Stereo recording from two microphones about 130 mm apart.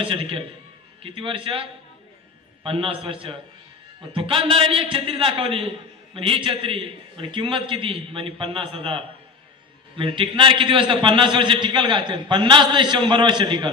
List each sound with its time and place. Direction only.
0.0 s a man's voice: 45° right (ahead or behind)